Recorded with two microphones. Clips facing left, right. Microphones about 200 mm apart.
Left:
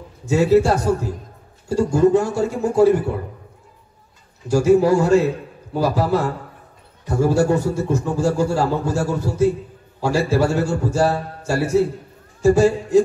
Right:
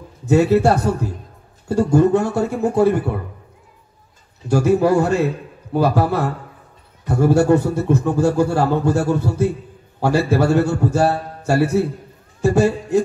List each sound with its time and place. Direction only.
0.3 s a man's voice: 60° right (ahead or behind)
4.5 s a man's voice: 60° right (ahead or behind)